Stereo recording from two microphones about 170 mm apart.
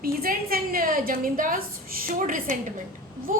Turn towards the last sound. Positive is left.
turn(degrees=-50)  # may be behind; listen again after turning